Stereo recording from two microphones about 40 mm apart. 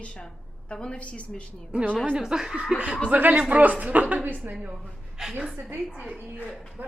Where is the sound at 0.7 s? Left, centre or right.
Left.